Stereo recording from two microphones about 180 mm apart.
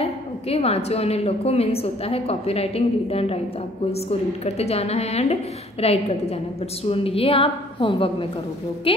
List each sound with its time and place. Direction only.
0.0 s a woman's voice: 35° left (ahead or behind)